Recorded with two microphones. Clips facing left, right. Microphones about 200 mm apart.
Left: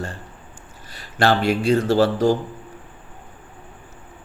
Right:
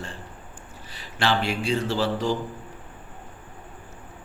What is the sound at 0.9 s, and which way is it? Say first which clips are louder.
Speech: left 6 dB; 45° left (ahead or behind).